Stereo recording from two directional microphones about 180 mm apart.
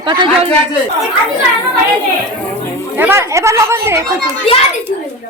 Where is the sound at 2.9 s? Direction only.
10° right (ahead or behind).